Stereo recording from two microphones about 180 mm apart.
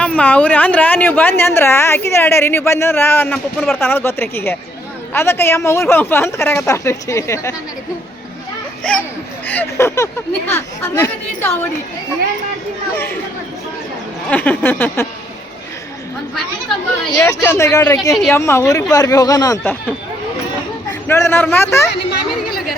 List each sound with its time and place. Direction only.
0.0 s speech: 10° left (ahead or behind)
8.8 s a child's voice: 5° left (ahead or behind)
14.3 s speech: 10° left (ahead or behind)
17.2 s speech: 10° left (ahead or behind)
21.1 s speech: 15° left (ahead or behind)